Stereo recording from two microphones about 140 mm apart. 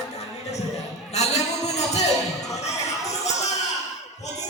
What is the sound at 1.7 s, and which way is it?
Music, 55° left (ahead or behind).